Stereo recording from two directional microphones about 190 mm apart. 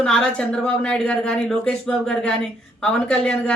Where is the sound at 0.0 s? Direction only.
5° left (ahead or behind).